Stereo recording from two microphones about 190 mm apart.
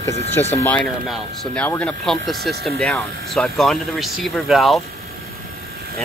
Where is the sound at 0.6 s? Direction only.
10° left (ahead or behind).